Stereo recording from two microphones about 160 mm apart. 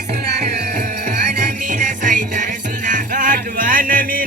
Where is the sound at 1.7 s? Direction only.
55° right (ahead or behind).